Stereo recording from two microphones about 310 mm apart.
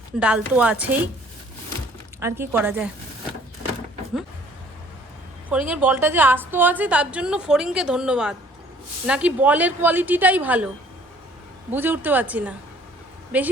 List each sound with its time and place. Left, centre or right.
0.2 s a woman's voice: centre
2.2 s a woman's voice: centre
5.5 s a woman's voice: centre
11.7 s a woman's voice: centre